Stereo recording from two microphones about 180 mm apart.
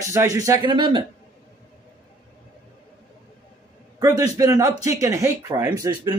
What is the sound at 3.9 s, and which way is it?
A man's voice, 20° right (ahead or behind).